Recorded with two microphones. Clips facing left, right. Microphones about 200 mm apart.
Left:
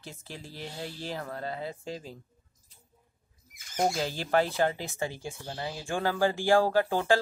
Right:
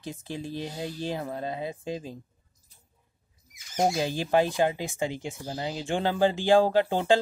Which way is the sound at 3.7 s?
15° right (ahead or behind).